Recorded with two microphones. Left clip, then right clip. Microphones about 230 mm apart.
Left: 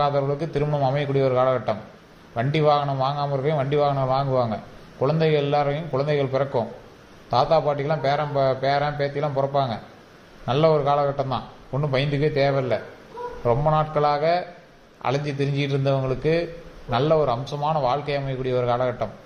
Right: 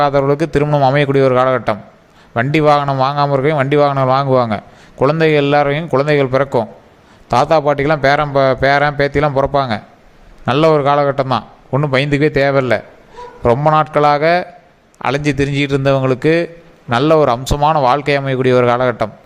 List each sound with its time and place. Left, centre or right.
0.0 s a man's voice: right